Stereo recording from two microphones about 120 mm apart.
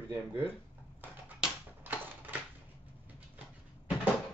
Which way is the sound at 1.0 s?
15° right (ahead or behind).